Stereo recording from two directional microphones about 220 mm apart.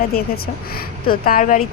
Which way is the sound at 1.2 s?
40° left (ahead or behind).